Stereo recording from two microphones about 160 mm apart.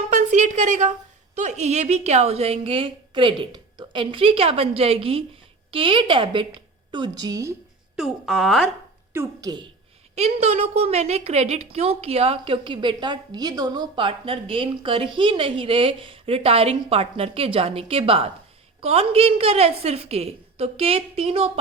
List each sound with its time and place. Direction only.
0.1 s a sound: 50° right (ahead or behind)
1.4 s a woman's voice: 45° right (ahead or behind); by 7.5 s 20° right (ahead or behind)
7.9 s speech: centre (ahead or behind)
9.1 s a woman's voice: 25° right (ahead or behind)
10.2 s a woman's voice: 40° right (ahead or behind)